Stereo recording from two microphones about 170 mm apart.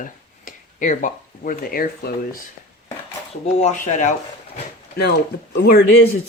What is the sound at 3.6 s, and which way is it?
Speech, 45° left (ahead or behind).